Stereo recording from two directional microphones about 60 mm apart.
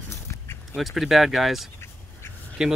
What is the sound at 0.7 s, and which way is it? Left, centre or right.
Speech, centre.